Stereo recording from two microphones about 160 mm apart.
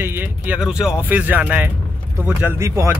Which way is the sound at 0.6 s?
5° right (ahead or behind).